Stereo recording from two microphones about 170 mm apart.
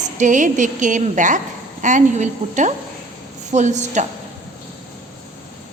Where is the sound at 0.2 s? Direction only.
50° right (ahead or behind).